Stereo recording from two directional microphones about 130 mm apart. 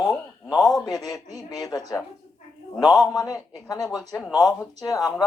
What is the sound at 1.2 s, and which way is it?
Speech, 25° left (ahead or behind).